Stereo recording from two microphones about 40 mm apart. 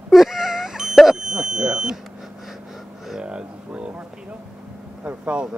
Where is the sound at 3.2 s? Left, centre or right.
Right.